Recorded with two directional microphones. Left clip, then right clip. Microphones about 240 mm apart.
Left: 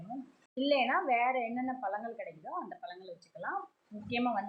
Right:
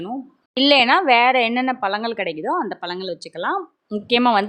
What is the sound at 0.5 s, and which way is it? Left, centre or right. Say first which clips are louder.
A woman's voice: right 15 dB; right.